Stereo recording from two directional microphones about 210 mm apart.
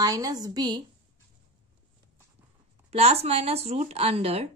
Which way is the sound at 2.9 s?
30° right (ahead or behind).